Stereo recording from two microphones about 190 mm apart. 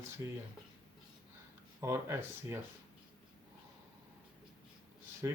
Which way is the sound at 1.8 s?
15° right (ahead or behind).